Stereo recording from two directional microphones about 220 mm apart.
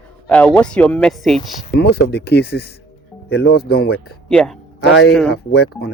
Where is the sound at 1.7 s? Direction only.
50° left (ahead or behind).